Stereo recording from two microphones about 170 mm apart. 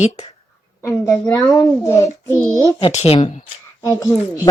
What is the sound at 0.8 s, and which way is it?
A child's voice, 15° left (ahead or behind).